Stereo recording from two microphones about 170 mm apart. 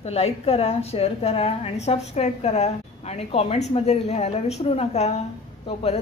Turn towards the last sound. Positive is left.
turn(degrees=35)  # may be behind; listen again after turning